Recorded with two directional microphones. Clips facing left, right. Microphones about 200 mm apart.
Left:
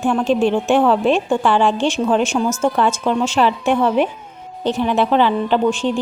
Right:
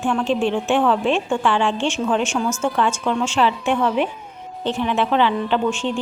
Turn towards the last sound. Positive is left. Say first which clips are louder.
# left 4 dB
turn(degrees=35)  # may be behind; listen again after turning